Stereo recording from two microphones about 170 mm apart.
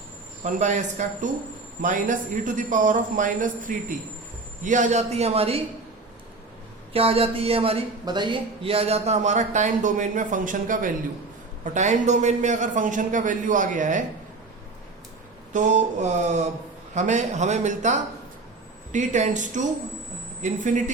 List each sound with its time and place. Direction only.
0.4 s a man's voice: 45° right (ahead or behind)
6.9 s a man's voice: 35° right (ahead or behind); by 14.0 s 50° right (ahead or behind)
15.5 s a man's voice: 45° right (ahead or behind)